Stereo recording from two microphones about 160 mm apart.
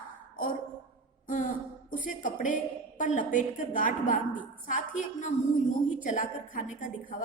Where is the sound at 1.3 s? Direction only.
55° left (ahead or behind).